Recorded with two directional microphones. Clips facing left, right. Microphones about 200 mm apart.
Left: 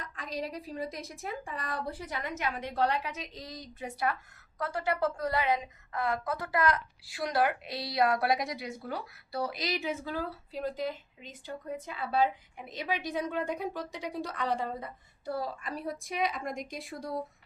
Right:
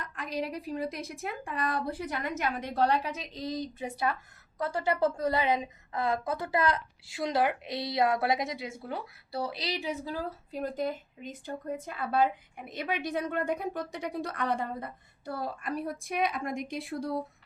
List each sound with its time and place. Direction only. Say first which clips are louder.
0.0 s a woman's voice: right 3 dB; 60° right (ahead or behind)